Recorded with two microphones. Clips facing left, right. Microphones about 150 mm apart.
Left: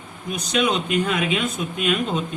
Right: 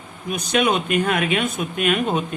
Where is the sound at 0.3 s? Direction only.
55° right (ahead or behind).